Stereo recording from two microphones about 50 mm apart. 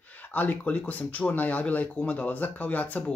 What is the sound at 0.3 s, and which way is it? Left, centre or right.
Speech, left.